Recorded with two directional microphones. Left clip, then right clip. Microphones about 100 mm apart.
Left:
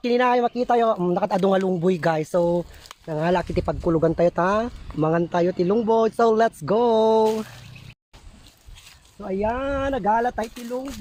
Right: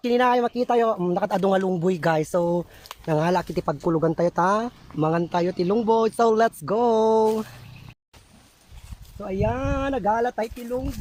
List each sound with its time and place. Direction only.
0.0 s speech: 15° right (ahead or behind)
3.1 s speech: 25° right (ahead or behind)
9.2 s speech: 15° right (ahead or behind)